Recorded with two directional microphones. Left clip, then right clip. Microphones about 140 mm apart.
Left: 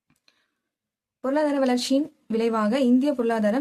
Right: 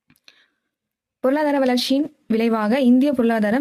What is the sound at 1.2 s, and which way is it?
A woman's voice, 35° right (ahead or behind).